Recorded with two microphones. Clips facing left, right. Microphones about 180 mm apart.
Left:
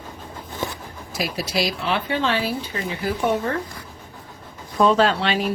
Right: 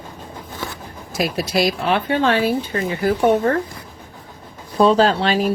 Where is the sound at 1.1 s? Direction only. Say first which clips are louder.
Right 5 dB; 50° right (ahead or behind).